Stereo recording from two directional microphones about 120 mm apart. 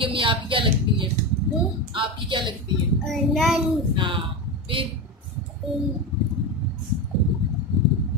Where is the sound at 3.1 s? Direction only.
Centre (ahead or behind).